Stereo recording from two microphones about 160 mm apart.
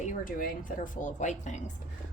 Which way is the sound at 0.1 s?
60° left (ahead or behind).